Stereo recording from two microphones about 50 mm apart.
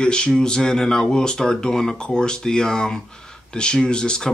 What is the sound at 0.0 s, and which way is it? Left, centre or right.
Speech, centre.